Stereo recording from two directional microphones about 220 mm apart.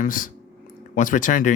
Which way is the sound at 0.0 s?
35° left (ahead or behind).